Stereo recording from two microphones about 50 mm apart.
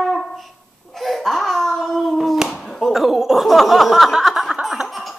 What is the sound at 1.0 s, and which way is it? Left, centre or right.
Hands, centre.